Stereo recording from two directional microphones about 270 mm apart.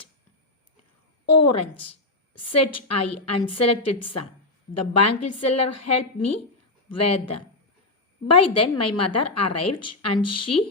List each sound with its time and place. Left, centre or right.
1.3 s a woman's voice: left